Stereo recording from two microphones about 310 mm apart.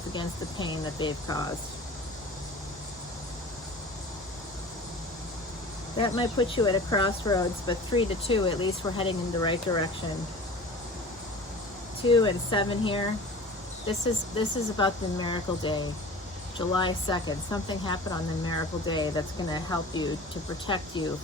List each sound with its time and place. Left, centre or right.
0.1 s speech: centre
6.0 s speech: centre
12.0 s speech: centre
14.3 s speech: centre